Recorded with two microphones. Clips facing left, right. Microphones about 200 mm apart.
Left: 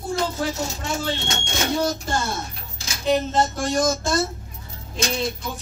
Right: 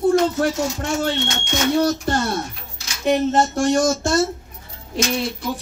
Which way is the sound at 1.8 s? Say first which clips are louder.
Right 5 dB; 60° right (ahead or behind).